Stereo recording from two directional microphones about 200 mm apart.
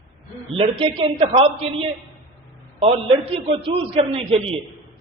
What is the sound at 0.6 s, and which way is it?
A man's voice, 25° right (ahead or behind).